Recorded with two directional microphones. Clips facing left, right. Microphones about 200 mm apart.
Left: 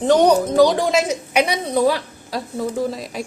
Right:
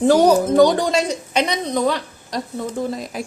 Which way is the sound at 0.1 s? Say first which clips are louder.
Left 1 dB; 5° right (ahead or behind).